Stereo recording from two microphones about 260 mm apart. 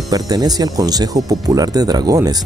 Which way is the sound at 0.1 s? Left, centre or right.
Centre.